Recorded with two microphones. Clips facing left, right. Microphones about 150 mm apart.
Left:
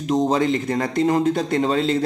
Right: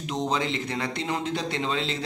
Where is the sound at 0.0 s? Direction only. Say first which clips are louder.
Left 9 dB; 45° left (ahead or behind).